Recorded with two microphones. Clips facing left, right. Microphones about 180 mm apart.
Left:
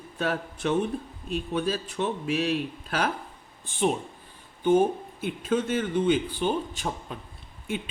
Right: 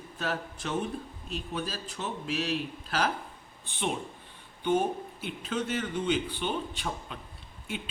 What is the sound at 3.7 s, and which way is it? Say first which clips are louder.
Speech: left 7 dB; 40° left (ahead or behind).